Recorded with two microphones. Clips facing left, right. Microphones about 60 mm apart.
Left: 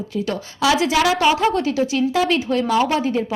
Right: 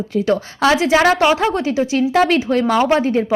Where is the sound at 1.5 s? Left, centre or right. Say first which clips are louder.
Right 1 dB; right.